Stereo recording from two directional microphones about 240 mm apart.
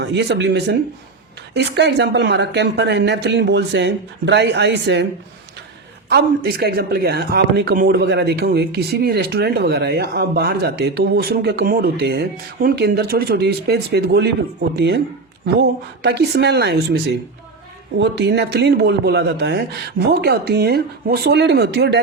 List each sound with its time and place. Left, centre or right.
0.0 s speech: right
6.1 s speech: right